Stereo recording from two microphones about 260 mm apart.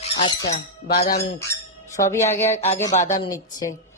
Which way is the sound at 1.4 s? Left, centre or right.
Centre.